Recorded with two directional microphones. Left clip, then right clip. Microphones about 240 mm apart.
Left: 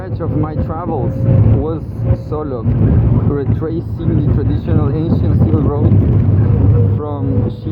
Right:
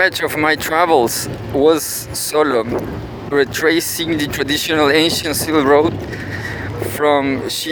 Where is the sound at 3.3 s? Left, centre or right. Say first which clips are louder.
Right 11 dB; right.